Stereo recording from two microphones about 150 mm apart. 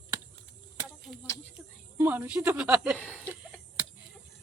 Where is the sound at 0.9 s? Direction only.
5° right (ahead or behind).